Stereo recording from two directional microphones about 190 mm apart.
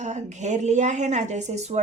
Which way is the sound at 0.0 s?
35° right (ahead or behind).